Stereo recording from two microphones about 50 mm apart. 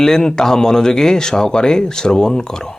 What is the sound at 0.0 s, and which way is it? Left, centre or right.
Speech, centre.